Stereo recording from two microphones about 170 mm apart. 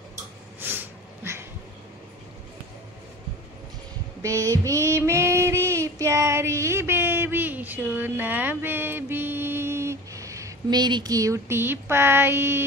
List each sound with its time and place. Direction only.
4.2 s female singing: 20° right (ahead or behind)